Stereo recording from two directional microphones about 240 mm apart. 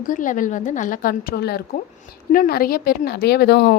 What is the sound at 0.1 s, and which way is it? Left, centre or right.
A woman's voice, left.